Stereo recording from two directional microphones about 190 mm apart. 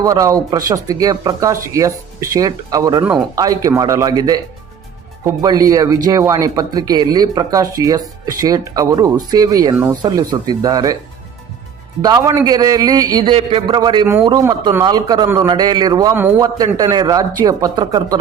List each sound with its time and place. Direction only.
0.0 s speech: 15° right (ahead or behind)
3.0 s speech: 10° right (ahead or behind)
3.3 s speech: 20° right (ahead or behind)
12.0 s speech: 20° right (ahead or behind)